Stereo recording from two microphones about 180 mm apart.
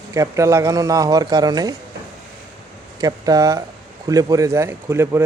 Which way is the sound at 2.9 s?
20° right (ahead or behind).